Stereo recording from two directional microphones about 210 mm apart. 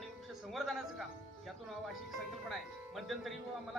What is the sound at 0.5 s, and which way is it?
Speech, centre (ahead or behind).